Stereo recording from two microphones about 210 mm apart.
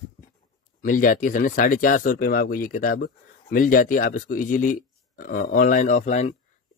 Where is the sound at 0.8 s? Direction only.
40° left (ahead or behind).